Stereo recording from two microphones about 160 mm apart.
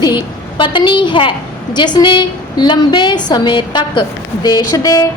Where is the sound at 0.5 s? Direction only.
30° left (ahead or behind).